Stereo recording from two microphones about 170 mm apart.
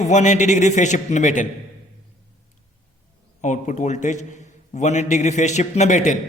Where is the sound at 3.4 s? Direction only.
45° left (ahead or behind).